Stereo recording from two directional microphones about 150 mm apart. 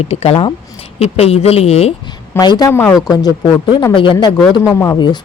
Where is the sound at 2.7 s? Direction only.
15° left (ahead or behind).